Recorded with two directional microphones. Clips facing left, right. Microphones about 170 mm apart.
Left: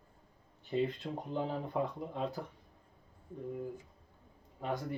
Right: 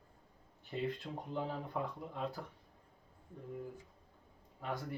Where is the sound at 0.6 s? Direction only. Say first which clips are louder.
Left 5 dB; 20° left (ahead or behind).